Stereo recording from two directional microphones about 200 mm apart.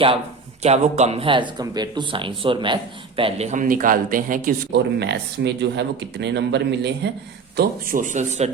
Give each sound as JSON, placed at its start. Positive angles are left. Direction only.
{"t": 0.6, "sound": "speech", "side_deg": -35}